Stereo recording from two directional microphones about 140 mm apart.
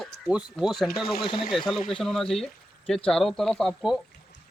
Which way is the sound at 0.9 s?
90° left.